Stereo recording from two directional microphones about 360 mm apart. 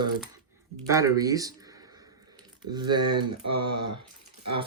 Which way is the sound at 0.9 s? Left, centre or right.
Centre.